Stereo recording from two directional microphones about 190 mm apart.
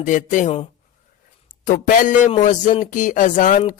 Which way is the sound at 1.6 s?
45° left (ahead or behind).